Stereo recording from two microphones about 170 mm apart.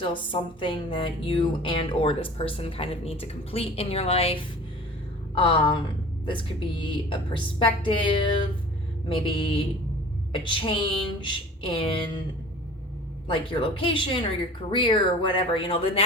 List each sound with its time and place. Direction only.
0.0 s a woman's voice: 30° left (ahead or behind)
13.2 s speech: 30° left (ahead or behind)